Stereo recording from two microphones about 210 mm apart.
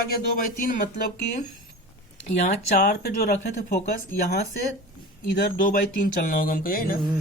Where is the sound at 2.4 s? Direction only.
45° left (ahead or behind).